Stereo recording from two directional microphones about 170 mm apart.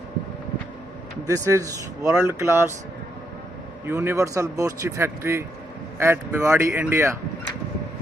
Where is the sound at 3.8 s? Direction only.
15° right (ahead or behind).